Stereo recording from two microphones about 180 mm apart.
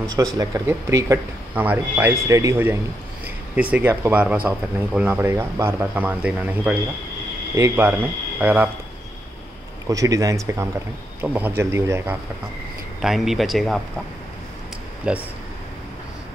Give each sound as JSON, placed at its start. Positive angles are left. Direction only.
{"t": 0.1, "sound": "speech", "side_deg": -20}
{"t": 9.8, "sound": "speech", "side_deg": -20}
{"t": 13.0, "sound": "speech", "side_deg": 0}
{"t": 15.1, "sound": "speech", "side_deg": -5}